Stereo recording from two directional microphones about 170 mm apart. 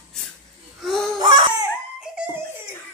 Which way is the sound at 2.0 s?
5° right (ahead or behind).